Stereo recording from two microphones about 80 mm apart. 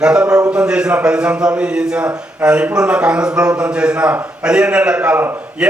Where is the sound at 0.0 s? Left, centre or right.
Centre.